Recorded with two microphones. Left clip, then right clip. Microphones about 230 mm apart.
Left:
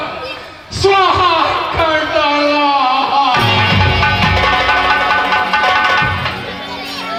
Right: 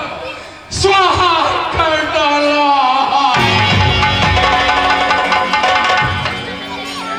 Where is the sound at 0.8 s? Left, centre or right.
Right.